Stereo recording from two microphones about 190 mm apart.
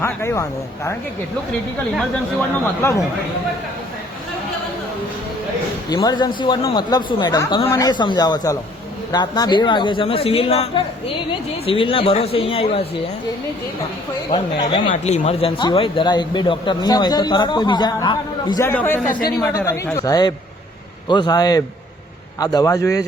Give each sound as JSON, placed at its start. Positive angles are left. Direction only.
{"t": 0.0, "sound": "speech", "side_deg": 15}
{"t": 5.9, "sound": "speech", "side_deg": 20}
{"t": 14.3, "sound": "speech", "side_deg": 25}
{"t": 14.8, "sound": "speech", "side_deg": 35}
{"t": 18.7, "sound": "speech", "side_deg": 10}